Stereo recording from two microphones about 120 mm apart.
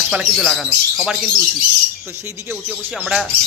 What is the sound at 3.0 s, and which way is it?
Speech, 10° right (ahead or behind).